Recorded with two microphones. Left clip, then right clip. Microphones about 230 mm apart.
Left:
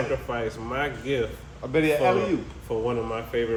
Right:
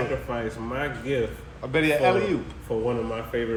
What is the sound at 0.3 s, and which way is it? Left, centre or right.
Speech, centre.